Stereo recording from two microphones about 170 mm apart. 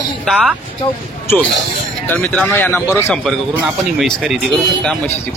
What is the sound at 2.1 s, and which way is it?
Speech, 10° left (ahead or behind).